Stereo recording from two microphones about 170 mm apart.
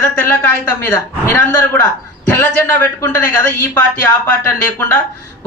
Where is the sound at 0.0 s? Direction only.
10° left (ahead or behind).